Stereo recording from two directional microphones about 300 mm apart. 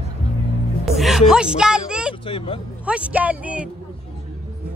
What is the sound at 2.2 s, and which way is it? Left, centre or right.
Speech, centre.